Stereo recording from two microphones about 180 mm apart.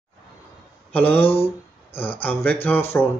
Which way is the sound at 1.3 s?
30° left (ahead or behind).